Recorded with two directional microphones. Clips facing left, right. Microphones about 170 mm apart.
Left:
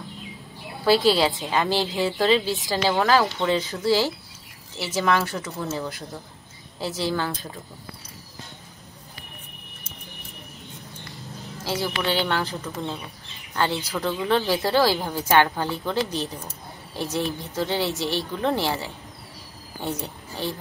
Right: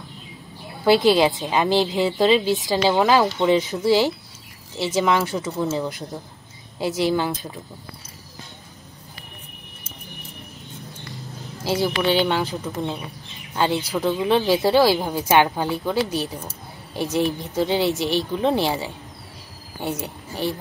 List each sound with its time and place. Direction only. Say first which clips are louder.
0.8 s a woman's voice: right 3 dB; 20° right (ahead or behind)
11.6 s a woman's voice: right 5 dB; 15° right (ahead or behind)
14.2 s a woman's voice: right 4 dB; 15° right (ahead or behind)